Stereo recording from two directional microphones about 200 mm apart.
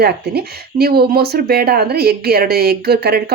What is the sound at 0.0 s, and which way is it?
Speech, 50° right (ahead or behind).